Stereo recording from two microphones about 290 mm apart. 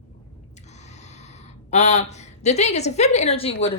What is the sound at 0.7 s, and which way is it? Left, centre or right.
A woman's voice, left.